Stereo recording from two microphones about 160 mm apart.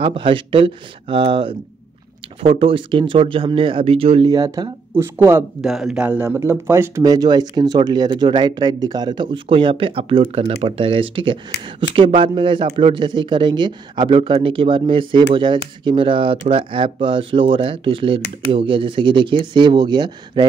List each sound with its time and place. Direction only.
0.0 s a man's voice: 35° right (ahead or behind)
2.5 s a man's voice: 35° right (ahead or behind); by 5.4 s 15° right (ahead or behind)
5.6 s a man's voice: centre (ahead or behind); by 20.4 s 30° right (ahead or behind)